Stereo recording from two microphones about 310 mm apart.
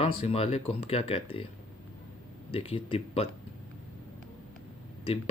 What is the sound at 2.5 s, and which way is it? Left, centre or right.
Speech, centre.